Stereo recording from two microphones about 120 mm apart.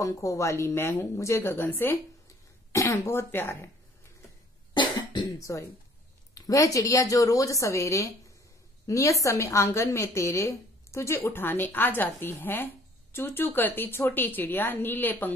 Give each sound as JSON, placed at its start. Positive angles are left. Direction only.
{"t": 0.0, "sound": "a woman's voice", "side_deg": 25}
{"t": 4.7, "sound": "cough", "side_deg": 40}
{"t": 5.4, "sound": "a woman's voice", "side_deg": 25}